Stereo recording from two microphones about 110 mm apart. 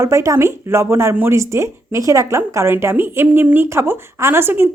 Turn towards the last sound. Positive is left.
turn(degrees=-20)  # may be behind; listen again after turning